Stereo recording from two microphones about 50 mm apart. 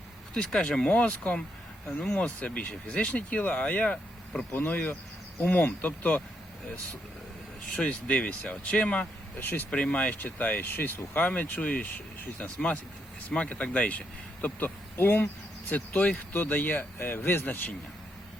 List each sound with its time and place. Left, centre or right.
0.3 s speech: centre
0.9 s speech: left
4.5 s speech: left
7.8 s speech: left
9.4 s speech: left
9.6 s speech: left
14.9 s speech: left
15.7 s speech: left